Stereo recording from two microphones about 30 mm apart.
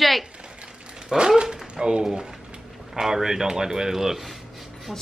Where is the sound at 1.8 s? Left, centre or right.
Right.